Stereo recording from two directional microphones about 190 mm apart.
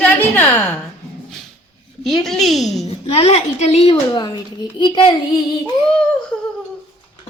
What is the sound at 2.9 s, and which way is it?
A woman's voice, 35° left (ahead or behind).